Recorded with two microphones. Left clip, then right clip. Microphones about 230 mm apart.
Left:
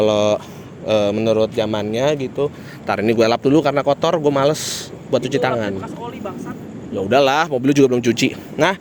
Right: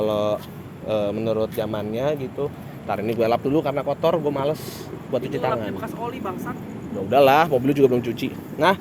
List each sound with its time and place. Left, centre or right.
0.0 s speech: left
7.1 s speech: left